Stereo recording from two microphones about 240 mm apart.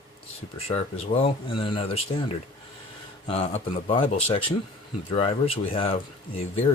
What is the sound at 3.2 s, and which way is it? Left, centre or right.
Speech, left.